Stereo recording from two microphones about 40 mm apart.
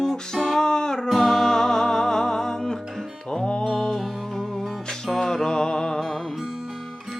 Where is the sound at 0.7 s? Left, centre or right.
Centre.